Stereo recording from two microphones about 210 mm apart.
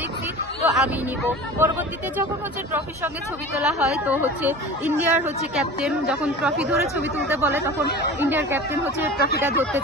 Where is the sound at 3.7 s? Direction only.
5° right (ahead or behind).